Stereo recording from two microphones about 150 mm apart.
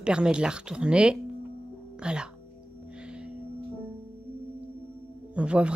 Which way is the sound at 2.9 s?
5° right (ahead or behind).